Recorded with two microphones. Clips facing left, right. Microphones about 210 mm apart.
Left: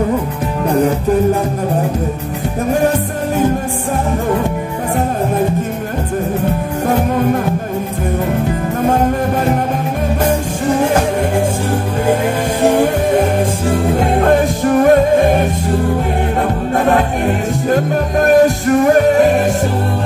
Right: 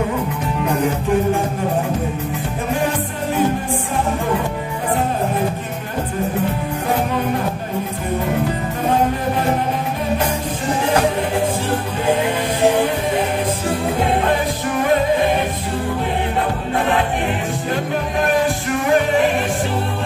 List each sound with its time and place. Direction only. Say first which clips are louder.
14.2 s music: left 7 dB; 45° left (ahead or behind)
17.6 s music: left 8 dB; 45° left (ahead or behind)